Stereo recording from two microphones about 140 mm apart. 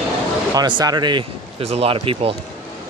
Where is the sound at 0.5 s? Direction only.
30° right (ahead or behind).